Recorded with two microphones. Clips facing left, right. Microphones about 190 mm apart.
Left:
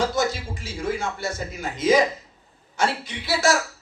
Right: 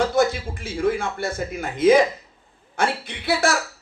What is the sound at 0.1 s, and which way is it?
A man's voice, 55° right (ahead or behind).